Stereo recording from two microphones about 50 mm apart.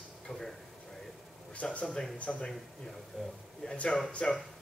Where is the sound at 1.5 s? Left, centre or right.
Left.